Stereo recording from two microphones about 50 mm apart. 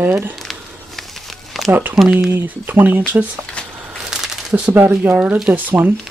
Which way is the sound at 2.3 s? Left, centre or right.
Right.